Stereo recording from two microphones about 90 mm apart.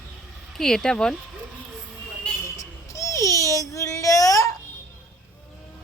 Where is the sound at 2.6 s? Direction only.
35° left (ahead or behind).